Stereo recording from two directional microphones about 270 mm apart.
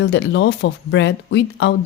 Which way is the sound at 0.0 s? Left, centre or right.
Left.